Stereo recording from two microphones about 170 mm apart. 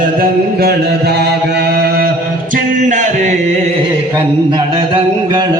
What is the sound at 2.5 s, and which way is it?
Music, 45° right (ahead or behind).